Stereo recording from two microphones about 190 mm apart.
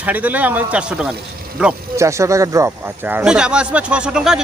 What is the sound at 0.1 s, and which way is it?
Speech, 10° right (ahead or behind).